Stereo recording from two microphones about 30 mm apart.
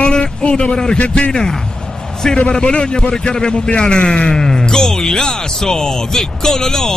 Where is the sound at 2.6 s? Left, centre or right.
Left.